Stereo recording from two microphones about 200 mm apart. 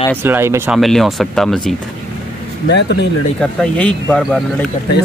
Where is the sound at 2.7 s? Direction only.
60° left (ahead or behind).